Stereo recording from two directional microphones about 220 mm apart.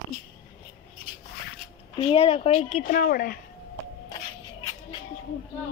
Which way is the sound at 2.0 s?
25° left (ahead or behind).